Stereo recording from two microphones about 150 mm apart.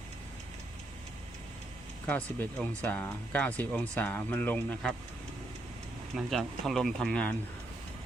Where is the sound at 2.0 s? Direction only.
10° left (ahead or behind).